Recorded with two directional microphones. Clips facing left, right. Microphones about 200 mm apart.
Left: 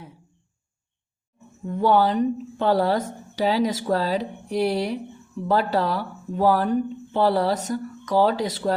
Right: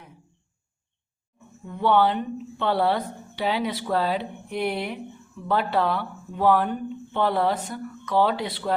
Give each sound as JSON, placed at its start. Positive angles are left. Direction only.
{"t": 1.6, "sound": "a woman's voice", "side_deg": 40}